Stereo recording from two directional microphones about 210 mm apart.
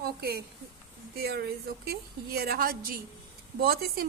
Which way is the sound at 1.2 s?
50° right (ahead or behind).